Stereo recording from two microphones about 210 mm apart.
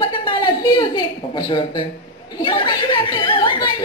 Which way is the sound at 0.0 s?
20° left (ahead or behind).